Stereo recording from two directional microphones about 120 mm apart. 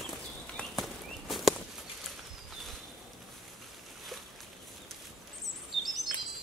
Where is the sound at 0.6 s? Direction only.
10° left (ahead or behind).